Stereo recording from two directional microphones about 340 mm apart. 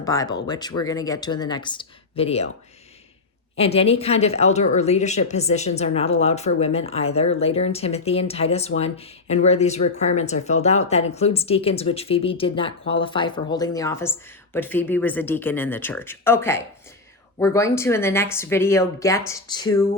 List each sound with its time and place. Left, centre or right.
0.0 s speech: centre
3.6 s speech: centre